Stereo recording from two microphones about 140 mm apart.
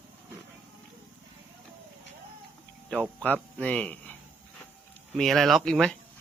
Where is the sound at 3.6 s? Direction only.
10° left (ahead or behind).